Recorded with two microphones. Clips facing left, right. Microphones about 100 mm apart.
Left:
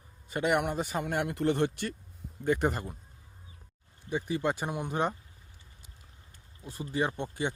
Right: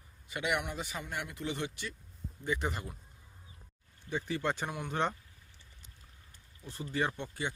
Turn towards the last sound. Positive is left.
turn(degrees=20)  # may be behind; listen again after turning